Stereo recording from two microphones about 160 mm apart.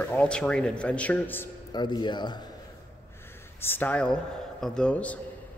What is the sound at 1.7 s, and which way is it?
Speech, 25° left (ahead or behind).